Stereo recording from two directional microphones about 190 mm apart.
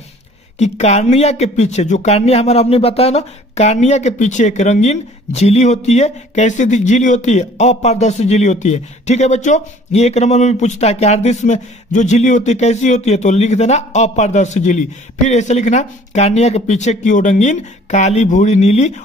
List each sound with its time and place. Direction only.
0.6 s speech: 35° left (ahead or behind)